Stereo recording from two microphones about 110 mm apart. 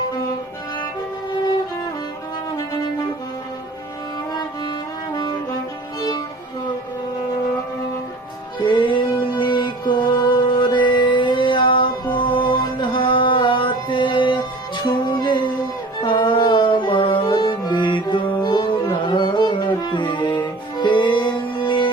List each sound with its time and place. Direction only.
5.1 s brass instrument: 35° left (ahead or behind)
6.0 s music: 40° left (ahead or behind)
8.6 s music: 50° left (ahead or behind)